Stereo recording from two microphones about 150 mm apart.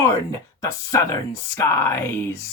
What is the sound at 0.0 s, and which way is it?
Speech, 20° left (ahead or behind).